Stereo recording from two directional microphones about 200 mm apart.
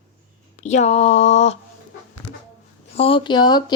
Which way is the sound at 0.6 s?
35° left (ahead or behind).